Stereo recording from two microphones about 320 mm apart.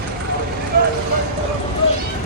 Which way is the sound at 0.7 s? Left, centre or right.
Right.